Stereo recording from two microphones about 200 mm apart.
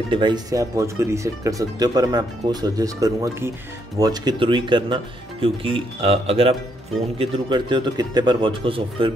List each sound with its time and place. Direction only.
0.1 s speech: 20° right (ahead or behind)